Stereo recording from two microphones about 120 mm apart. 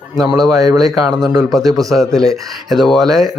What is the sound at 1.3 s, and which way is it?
Speech, 30° right (ahead or behind).